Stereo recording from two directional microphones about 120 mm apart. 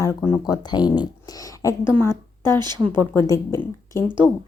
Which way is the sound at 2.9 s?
20° left (ahead or behind).